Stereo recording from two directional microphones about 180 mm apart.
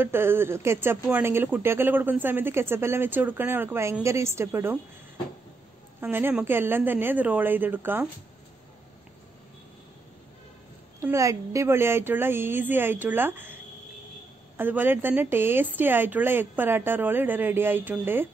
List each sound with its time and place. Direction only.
0.0 s speech: 10° right (ahead or behind)
5.9 s speech: 10° right (ahead or behind)
11.0 s speech: 15° right (ahead or behind)
14.6 s speech: 10° right (ahead or behind)